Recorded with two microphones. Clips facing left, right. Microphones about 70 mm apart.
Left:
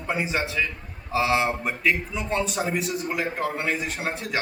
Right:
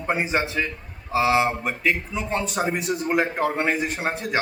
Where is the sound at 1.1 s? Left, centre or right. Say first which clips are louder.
Right 3 dB; right.